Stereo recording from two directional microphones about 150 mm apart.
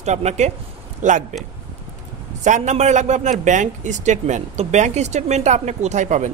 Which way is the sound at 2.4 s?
55° right (ahead or behind).